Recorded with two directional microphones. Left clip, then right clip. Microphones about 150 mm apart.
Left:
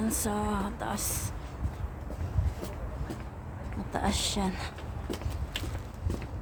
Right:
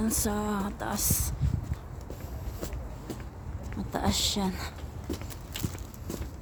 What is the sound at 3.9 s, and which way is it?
Speech, 20° right (ahead or behind).